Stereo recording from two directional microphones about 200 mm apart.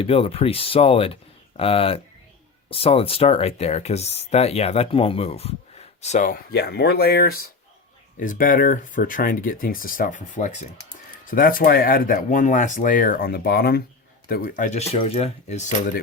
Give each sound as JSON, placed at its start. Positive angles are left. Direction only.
{"t": 0.0, "sound": "speech", "side_deg": 30}